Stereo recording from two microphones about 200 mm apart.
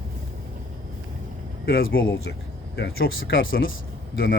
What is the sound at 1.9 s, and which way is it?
Speech, 50° left (ahead or behind).